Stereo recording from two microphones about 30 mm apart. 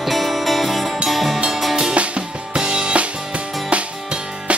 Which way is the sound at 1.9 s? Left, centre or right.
Right.